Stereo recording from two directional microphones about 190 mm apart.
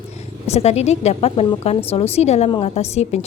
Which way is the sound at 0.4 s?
35° left (ahead or behind).